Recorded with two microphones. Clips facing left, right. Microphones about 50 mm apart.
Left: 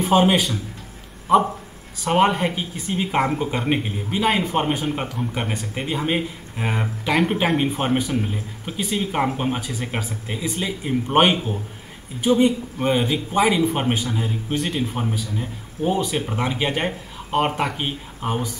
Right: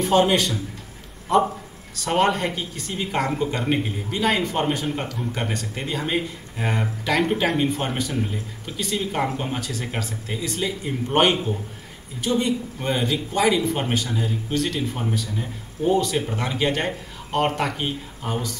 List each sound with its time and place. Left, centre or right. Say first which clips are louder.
0.0 s a man's voice: left 1 dB; centre